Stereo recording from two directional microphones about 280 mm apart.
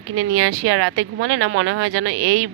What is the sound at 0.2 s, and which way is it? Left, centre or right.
Speech, right.